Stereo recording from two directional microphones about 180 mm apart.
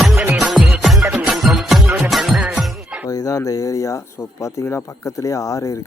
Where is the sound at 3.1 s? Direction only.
20° left (ahead or behind).